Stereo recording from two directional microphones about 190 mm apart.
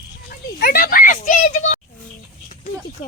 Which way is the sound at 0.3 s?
50° left (ahead or behind).